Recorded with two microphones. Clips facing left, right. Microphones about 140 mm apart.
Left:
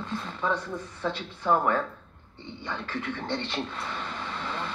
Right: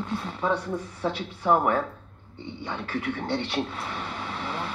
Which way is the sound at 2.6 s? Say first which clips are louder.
Right 3 dB; 10° right (ahead or behind).